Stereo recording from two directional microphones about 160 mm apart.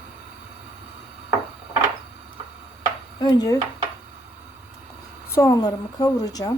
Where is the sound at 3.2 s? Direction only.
25° left (ahead or behind).